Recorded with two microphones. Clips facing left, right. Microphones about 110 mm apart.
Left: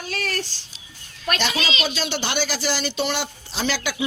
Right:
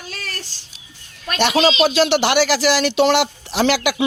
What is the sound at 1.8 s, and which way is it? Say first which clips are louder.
Speech: right 11 dB; 85° right.